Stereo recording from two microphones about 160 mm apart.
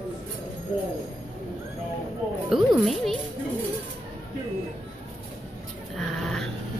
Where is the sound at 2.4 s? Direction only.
Centre (ahead or behind).